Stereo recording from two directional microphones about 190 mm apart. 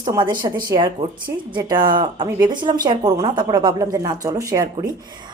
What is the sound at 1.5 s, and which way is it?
A woman's voice, 25° right (ahead or behind).